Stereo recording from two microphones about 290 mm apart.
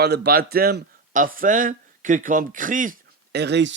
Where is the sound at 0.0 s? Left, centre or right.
Right.